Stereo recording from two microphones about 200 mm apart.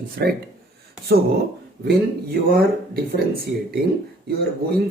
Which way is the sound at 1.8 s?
50° right (ahead or behind).